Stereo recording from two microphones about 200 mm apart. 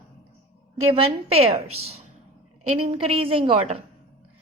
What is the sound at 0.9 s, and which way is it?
A woman's voice, 30° right (ahead or behind).